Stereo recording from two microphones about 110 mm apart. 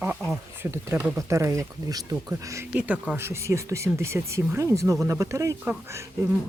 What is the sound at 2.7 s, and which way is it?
Speech, 10° right (ahead or behind).